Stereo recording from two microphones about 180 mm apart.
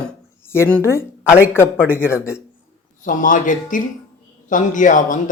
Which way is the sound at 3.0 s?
45° left (ahead or behind).